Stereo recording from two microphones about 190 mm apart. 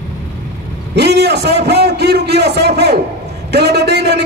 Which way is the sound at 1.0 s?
60° right (ahead or behind).